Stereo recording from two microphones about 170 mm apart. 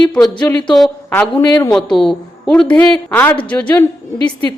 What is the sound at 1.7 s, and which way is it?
A woman's voice, centre (ahead or behind).